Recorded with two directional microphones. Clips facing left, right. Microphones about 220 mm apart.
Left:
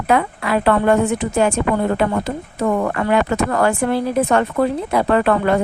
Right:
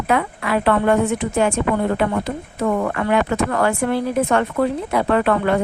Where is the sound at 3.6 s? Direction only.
35° left (ahead or behind).